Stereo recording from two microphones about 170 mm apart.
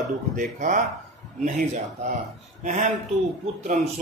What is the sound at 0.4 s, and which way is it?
Speech, 45° right (ahead or behind).